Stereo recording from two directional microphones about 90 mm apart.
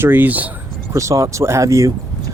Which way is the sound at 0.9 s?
35° right (ahead or behind).